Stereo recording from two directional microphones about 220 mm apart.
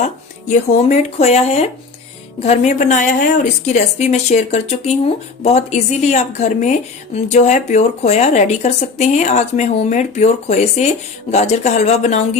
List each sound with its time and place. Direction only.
0.0 s speech: 30° left (ahead or behind)